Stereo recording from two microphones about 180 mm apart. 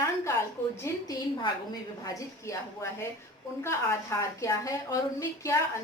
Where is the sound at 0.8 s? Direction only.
20° left (ahead or behind).